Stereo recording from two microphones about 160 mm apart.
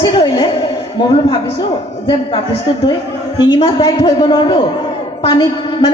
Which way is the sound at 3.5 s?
30° left (ahead or behind).